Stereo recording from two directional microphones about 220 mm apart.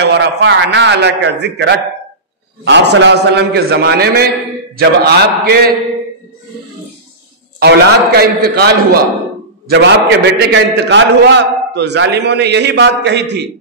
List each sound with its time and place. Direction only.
0.0 s a man's voice: 55° right (ahead or behind)
7.6 s a man's voice: 45° right (ahead or behind)